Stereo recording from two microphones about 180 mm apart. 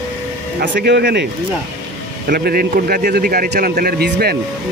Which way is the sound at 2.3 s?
55° right (ahead or behind).